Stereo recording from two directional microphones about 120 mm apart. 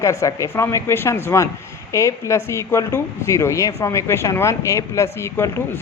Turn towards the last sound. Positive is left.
turn(degrees=20)  # may be behind; listen again after turning